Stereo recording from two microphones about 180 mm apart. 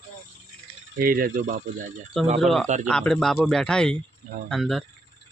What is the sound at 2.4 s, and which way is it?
Speech, centre (ahead or behind).